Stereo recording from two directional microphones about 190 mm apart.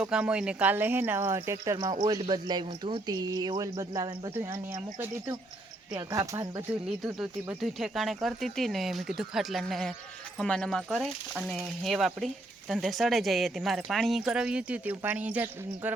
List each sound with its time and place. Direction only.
0.0 s speech: 5° right (ahead or behind)